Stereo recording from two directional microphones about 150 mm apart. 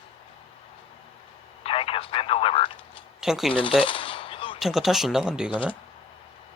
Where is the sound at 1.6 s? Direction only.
40° left (ahead or behind).